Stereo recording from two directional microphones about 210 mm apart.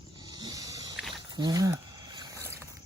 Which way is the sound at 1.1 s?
20° right (ahead or behind).